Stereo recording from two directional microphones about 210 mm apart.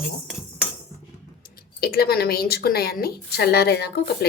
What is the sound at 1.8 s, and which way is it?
A woman's voice, 50° left (ahead or behind).